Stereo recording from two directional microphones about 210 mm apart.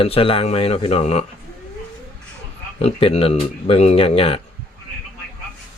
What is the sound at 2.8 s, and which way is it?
Speech, 30° left (ahead or behind).